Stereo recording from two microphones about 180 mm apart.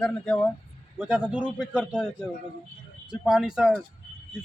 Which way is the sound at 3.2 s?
5° right (ahead or behind).